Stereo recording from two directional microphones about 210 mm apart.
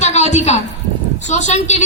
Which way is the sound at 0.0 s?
35° left (ahead or behind).